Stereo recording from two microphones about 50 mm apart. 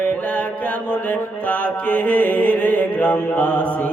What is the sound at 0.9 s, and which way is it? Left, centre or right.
Mantra, left.